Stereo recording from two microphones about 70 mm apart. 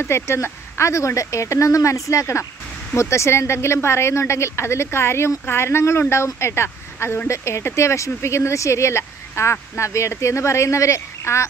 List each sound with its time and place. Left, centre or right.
0.0 s speech: left